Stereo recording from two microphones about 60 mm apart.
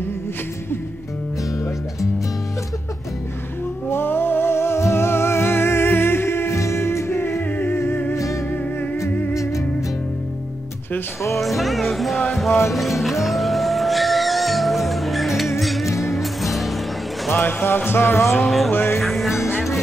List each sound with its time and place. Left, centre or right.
3.9 s music: left
9.3 s music: left
11.3 s speech: centre
13.2 s music: centre
17.3 s music: left
18.9 s music: centre